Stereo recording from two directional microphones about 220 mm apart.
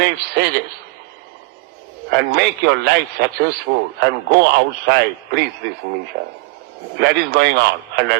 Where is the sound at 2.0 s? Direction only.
50° right (ahead or behind).